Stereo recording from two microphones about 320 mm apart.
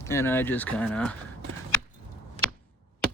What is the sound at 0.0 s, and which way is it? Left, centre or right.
Speech, centre.